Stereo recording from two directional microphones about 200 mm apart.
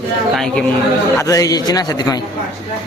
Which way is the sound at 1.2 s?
15° left (ahead or behind).